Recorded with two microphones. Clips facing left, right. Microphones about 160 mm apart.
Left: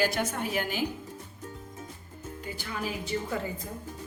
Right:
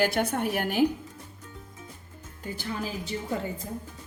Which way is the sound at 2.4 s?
35° right (ahead or behind).